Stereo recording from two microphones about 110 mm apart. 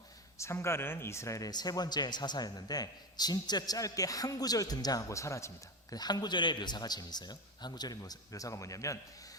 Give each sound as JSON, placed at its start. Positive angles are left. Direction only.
{"t": 0.3, "sound": "speech", "side_deg": 25}